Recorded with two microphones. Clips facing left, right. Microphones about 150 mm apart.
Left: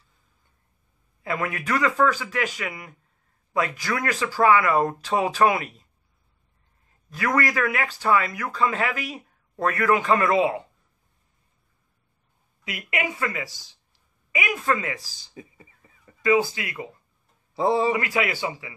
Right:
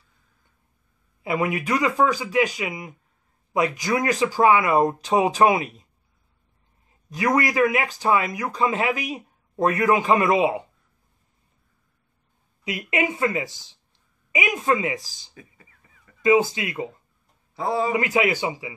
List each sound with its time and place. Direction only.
1.2 s speech: 15° right (ahead or behind)
7.1 s speech: 15° right (ahead or behind)
12.6 s speech: 20° right (ahead or behind)
15.3 s a sound: 25° left (ahead or behind)
16.2 s speech: 20° right (ahead or behind)
17.6 s a man's voice: 25° left (ahead or behind)
17.9 s speech: 20° right (ahead or behind)